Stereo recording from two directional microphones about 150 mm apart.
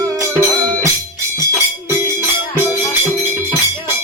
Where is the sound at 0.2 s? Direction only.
20° right (ahead or behind).